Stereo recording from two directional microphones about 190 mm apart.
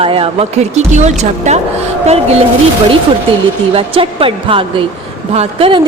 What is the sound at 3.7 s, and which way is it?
Speech, 30° right (ahead or behind).